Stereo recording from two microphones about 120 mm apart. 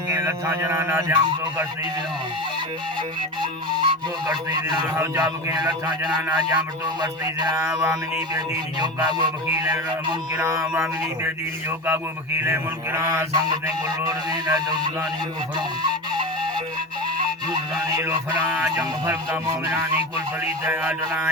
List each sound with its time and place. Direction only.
0.2 s mantra: 20° right (ahead or behind)
3.4 s speech: 40° right (ahead or behind)
7.7 s mantra: 20° right (ahead or behind)
8.3 s speech: 35° right (ahead or behind)
9.5 s mantra: 25° right (ahead or behind)
11.9 s mantra: 20° right (ahead or behind)
13.3 s speech: 35° right (ahead or behind)
15.5 s flute: 40° right (ahead or behind)
17.8 s speech: 30° right (ahead or behind)
19.0 s mantra: 20° right (ahead or behind)
20.4 s a man's voice: 15° right (ahead or behind)